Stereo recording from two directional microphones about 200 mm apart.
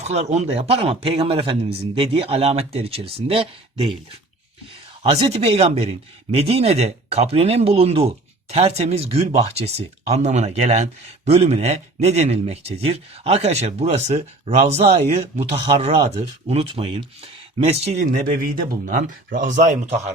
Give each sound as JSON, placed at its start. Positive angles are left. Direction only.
{"t": 0.0, "sound": "a man's voice", "side_deg": -35}
{"t": 5.3, "sound": "speech", "side_deg": -30}
{"t": 18.0, "sound": "speech", "side_deg": -45}